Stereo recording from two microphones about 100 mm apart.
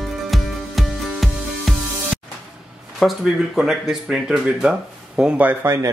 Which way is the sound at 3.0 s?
Centre (ahead or behind).